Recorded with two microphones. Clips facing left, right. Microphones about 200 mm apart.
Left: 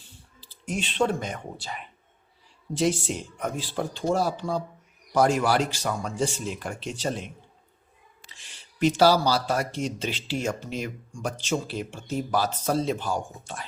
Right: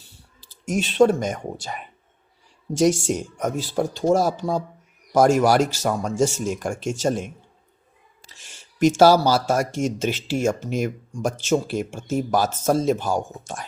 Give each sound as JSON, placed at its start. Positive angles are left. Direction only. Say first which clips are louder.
{"t": 0.3, "sound": "speech", "louder": "right 6 dB", "side_deg": -45}